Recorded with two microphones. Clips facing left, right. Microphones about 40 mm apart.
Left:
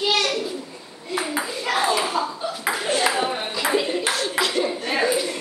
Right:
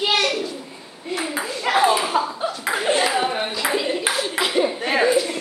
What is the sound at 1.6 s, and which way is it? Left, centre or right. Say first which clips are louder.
Ping: right 5 dB; centre.